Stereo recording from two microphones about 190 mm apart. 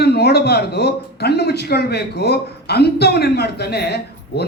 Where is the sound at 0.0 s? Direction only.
60° left (ahead or behind).